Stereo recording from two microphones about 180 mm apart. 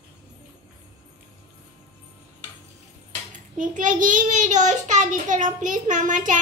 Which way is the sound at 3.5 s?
45° right (ahead or behind).